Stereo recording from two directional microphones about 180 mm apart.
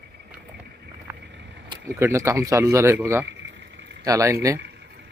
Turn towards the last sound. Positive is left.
turn(degrees=-70)  # may be behind; listen again after turning